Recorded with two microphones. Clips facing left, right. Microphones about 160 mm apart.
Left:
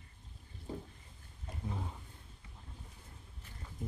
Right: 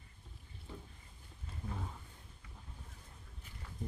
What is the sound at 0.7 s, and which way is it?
Boat, 40° left (ahead or behind).